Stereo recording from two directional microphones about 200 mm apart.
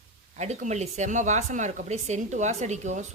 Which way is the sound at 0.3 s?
35° right (ahead or behind).